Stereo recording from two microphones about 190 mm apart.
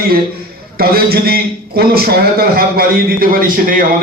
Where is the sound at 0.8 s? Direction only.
55° right (ahead or behind).